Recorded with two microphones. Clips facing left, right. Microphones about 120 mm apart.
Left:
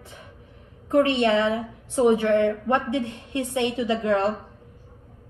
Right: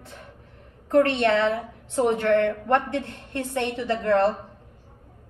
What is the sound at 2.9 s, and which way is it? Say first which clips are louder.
Speech: left 3 dB; 55° right (ahead or behind).